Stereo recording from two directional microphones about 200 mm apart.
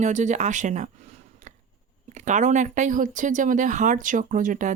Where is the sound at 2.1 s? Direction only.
35° right (ahead or behind).